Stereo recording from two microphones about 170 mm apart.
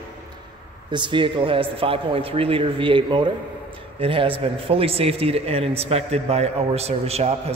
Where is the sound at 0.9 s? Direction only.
30° right (ahead or behind).